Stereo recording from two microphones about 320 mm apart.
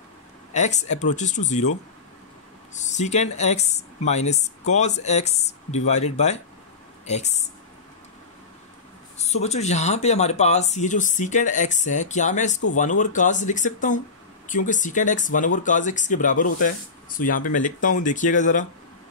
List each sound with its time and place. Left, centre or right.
0.5 s speech: left
2.7 s speech: left
9.2 s speech: left